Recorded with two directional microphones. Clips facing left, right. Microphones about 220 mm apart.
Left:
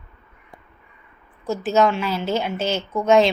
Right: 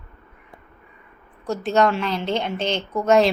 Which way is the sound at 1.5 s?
5° left (ahead or behind).